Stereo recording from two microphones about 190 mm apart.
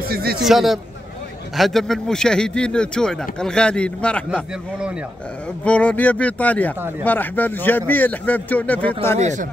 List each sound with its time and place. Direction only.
0.1 s a man's voice: 55° right (ahead or behind)
0.5 s speech: centre (ahead or behind)
5.6 s speech: 5° left (ahead or behind)
9.2 s speech: 40° right (ahead or behind)